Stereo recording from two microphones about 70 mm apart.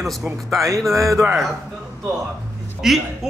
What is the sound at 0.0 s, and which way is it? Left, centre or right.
Speech, centre.